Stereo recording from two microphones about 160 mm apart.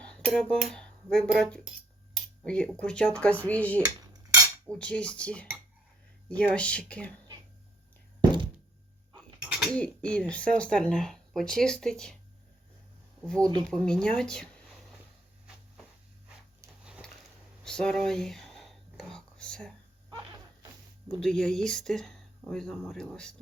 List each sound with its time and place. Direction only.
0.0 s speech: 5° left (ahead or behind)
3.8 s cutlery: 20° right (ahead or behind)
4.7 s speech: 5° left (ahead or behind)
9.1 s a sound: 5° right (ahead or behind)
9.7 s speech: 5° left (ahead or behind)
13.2 s speech: 5° left (ahead or behind)
17.6 s whispering: 5° left (ahead or behind)
20.1 s a sound: 25° right (ahead or behind)
21.1 s speech: 5° left (ahead or behind)